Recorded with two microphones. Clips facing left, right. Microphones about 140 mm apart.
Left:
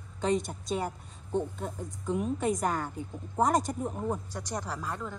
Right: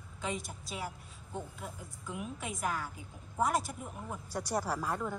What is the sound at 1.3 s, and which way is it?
Speech, 40° left (ahead or behind).